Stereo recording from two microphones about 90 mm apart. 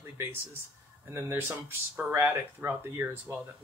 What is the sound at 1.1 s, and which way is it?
Speech, 25° right (ahead or behind).